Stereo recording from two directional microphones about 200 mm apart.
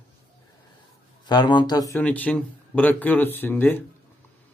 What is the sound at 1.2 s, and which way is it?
Speech, 20° left (ahead or behind).